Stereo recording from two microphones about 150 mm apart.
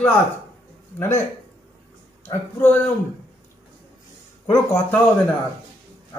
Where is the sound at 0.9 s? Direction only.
15° left (ahead or behind).